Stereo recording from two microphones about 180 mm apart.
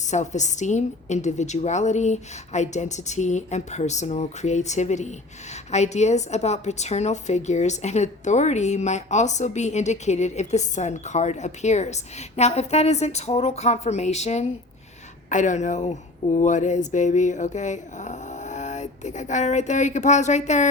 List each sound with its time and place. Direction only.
0.0 s a woman's voice: 40° left (ahead or behind)